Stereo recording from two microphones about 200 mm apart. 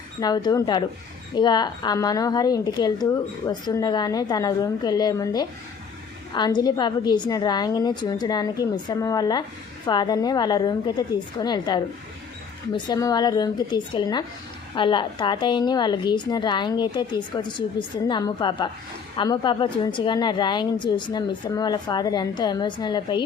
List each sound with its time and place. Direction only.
0.2 s a woman's voice: 20° left (ahead or behind)